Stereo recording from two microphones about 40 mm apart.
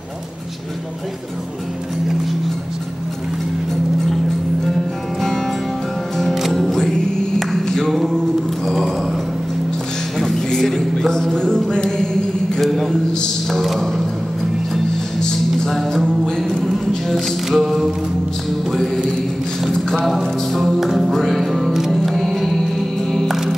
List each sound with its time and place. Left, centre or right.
7.5 s a capella: centre
8.6 s a sound: centre
10.1 s a sound: centre
12.5 s a sound: centre
13.5 s speech: centre
15.7 s music: centre
16.3 s music: centre
17.1 s music: centre
20.1 s music: centre
21.1 s music: centre
21.9 s music: centre